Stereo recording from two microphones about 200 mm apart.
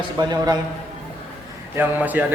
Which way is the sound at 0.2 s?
20° right (ahead or behind).